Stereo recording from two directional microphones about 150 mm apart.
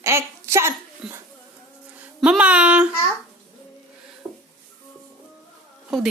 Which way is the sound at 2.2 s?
5° right (ahead or behind).